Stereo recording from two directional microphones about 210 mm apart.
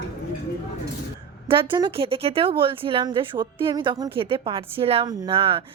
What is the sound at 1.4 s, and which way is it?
A woman's voice, 25° right (ahead or behind).